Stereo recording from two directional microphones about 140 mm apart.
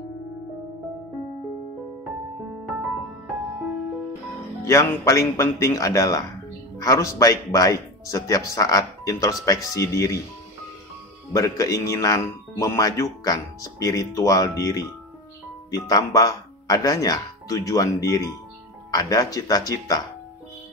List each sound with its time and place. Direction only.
4.6 s speech: 20° left (ahead or behind)
11.3 s speech: 25° left (ahead or behind)